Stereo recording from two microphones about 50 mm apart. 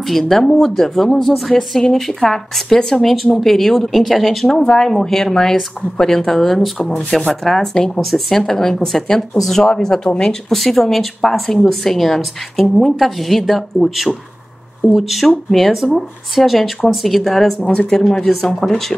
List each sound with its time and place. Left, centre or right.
0.0 s a woman's voice: centre
10.5 s a woman's voice: centre
17.7 s speech: centre
18.0 s a woman's voice: centre